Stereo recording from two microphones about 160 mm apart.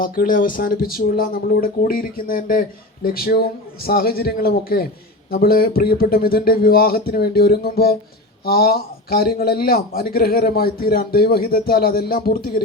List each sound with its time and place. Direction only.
0.0 s a man's voice: 60° left (ahead or behind)